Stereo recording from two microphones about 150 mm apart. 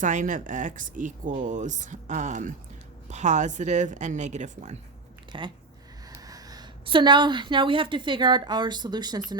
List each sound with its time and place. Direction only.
0.0 s speech: 60° right (ahead or behind)
5.3 s a woman's voice: 35° right (ahead or behind)